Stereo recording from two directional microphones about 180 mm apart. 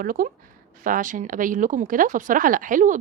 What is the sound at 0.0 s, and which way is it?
Speech, 50° right (ahead or behind).